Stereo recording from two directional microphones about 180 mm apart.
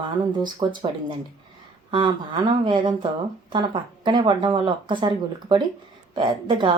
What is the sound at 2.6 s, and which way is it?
A woman's voice, 25° right (ahead or behind).